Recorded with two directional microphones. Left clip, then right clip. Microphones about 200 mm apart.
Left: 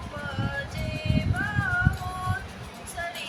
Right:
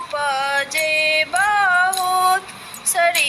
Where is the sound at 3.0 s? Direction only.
50° right (ahead or behind).